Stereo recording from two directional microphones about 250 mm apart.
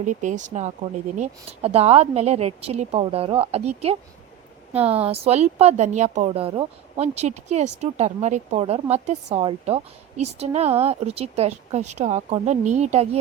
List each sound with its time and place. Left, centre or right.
0.0 s speech: right